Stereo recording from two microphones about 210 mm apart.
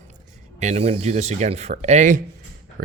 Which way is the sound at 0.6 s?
30° right (ahead or behind).